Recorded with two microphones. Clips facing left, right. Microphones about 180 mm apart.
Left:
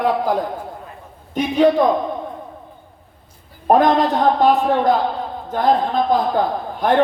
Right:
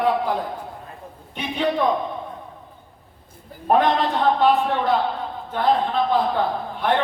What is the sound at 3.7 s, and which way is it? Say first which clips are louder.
A man's voice: left 4 dB; 40° left (ahead or behind).